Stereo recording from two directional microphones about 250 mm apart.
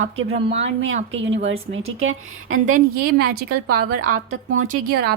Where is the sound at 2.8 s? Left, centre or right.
Right.